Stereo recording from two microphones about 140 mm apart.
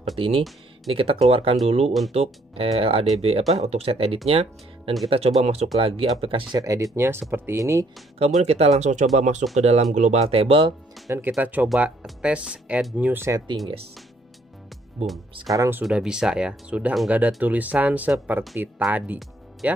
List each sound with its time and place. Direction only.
0.2 s speech: 40° right (ahead or behind)
6.5 s speech: 25° right (ahead or behind)
8.4 s speech: 50° right (ahead or behind)
11.1 s speech: 15° right (ahead or behind)
15.5 s speech: 20° right (ahead or behind)
15.8 s speech: 5° right (ahead or behind)